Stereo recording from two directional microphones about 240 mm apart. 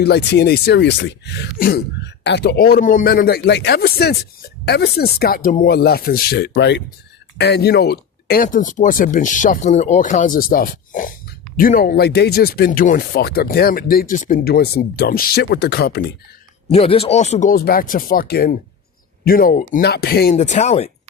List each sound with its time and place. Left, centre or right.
0.0 s speech: left
16.7 s speech: left
20.3 s speech: left